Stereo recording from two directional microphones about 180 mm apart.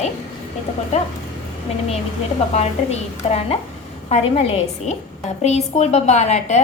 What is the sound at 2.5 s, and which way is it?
A woman's voice, 35° left (ahead or behind).